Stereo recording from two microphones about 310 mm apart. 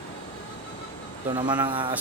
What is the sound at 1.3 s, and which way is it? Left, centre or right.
Speech, centre.